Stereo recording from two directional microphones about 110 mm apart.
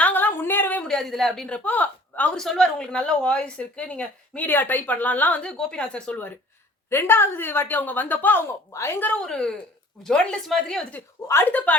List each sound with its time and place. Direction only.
0.0 s a sound: 15° left (ahead or behind)
0.9 s a woman's voice: centre (ahead or behind)
11.3 s a woman's voice: 20° left (ahead or behind)